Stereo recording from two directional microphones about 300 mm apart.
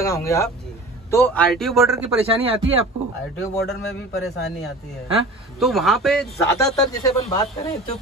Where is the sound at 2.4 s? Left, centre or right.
Centre.